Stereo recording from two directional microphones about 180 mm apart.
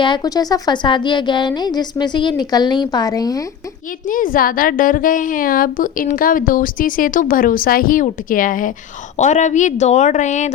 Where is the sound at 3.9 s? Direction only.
50° left (ahead or behind).